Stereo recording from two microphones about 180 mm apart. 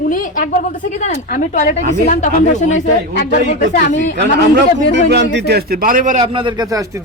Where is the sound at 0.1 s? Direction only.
50° left (ahead or behind).